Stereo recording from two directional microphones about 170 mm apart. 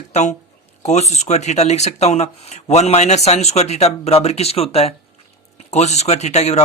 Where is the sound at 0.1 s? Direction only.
40° left (ahead or behind).